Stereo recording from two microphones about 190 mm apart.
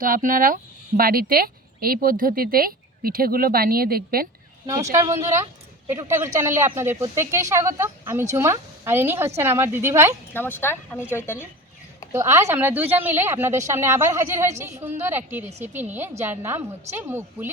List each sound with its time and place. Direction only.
0.0 s speech: 45° right (ahead or behind)
4.6 s speech: 15° right (ahead or behind)
10.3 s speech: 10° left (ahead or behind)
12.1 s speech: 15° right (ahead or behind)